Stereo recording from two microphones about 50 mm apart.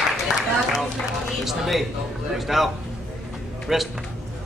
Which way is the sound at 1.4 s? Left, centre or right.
Centre.